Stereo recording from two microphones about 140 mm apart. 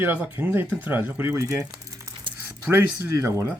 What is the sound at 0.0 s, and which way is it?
Speech, 10° right (ahead or behind).